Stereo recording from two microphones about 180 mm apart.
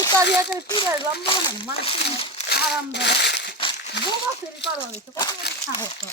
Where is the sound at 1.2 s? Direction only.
30° left (ahead or behind).